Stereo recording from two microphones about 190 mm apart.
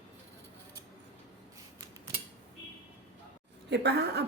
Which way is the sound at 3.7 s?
60° right (ahead or behind).